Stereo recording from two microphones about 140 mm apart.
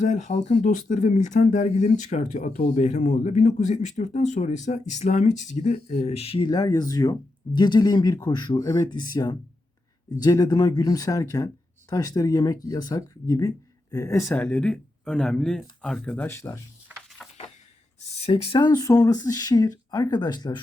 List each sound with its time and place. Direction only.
0.0 s speech: 60° left (ahead or behind); by 14.3 s 20° left (ahead or behind)
14.3 s speech: 10° left (ahead or behind)
16.9 s a sound: 10° right (ahead or behind)
18.2 s speech: 40° left (ahead or behind)